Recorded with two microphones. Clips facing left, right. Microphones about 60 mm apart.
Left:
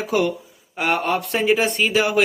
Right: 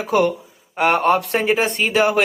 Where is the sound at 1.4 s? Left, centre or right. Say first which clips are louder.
Even; right.